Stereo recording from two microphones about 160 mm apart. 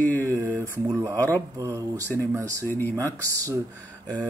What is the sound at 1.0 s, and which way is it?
Speech, 20° right (ahead or behind).